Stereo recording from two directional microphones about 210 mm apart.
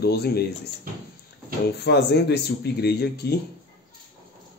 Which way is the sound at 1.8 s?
55° left (ahead or behind).